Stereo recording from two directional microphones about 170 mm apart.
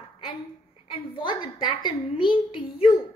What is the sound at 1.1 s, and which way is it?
A woman's voice, 25° left (ahead or behind).